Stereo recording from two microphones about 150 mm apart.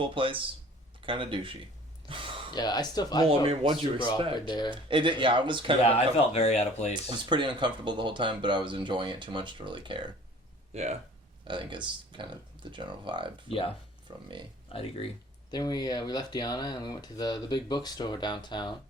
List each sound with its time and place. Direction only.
0.0 s speech: 35° right (ahead or behind)
2.0 s a sound: 35° right (ahead or behind)
2.5 s speech: 30° left (ahead or behind)
3.2 s speech: 40° right (ahead or behind)
4.4 s speech: 30° left (ahead or behind)
4.7 s speech: 35° right (ahead or behind)
6.3 s speech: 45° left (ahead or behind)
6.9 s speech: 30° right (ahead or behind)
10.7 s speech: 45° right (ahead or behind)
11.4 s speech: 35° right (ahead or behind)
13.5 s speech: 40° left (ahead or behind)
14.1 s speech: 30° right (ahead or behind)
14.7 s speech: 40° left (ahead or behind)
15.4 s speech: 25° left (ahead or behind)